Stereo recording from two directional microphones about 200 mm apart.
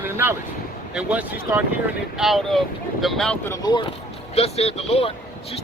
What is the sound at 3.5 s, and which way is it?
Speech, 20° left (ahead or behind).